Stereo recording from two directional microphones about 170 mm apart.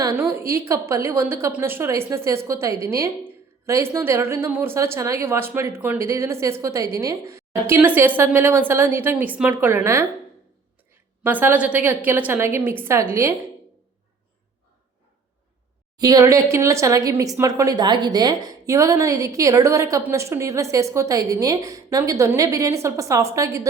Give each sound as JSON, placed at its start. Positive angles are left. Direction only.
{"t": 0.0, "sound": "a woman's voice", "side_deg": -15}
{"t": 11.2, "sound": "a woman's voice", "side_deg": -10}
{"t": 16.0, "sound": "speech", "side_deg": -20}